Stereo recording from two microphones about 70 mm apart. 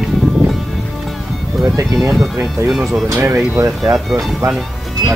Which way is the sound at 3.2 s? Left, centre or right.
Right.